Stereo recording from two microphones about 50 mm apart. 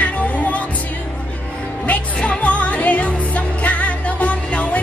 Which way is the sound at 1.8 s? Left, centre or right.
Left.